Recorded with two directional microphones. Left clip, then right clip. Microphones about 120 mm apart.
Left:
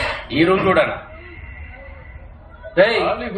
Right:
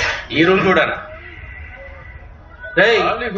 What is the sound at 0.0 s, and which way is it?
Speech, 45° left (ahead or behind).